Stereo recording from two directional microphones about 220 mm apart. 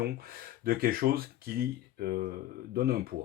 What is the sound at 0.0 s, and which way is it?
Speech, 45° right (ahead or behind).